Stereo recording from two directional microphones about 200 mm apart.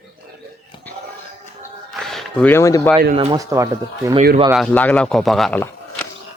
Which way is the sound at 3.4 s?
15° right (ahead or behind).